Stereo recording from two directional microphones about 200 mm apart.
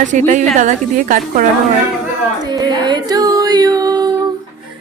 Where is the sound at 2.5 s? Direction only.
20° right (ahead or behind).